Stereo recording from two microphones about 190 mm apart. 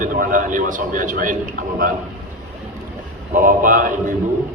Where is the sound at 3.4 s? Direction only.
45° right (ahead or behind).